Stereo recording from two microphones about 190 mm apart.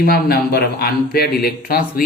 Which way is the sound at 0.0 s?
55° left (ahead or behind).